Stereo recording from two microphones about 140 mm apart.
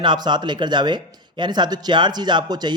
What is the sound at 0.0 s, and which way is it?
Speech, 30° right (ahead or behind).